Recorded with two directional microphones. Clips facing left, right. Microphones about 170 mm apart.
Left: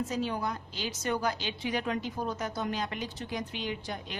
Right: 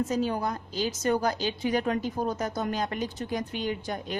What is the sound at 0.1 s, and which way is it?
A woman's voice, 45° right (ahead or behind).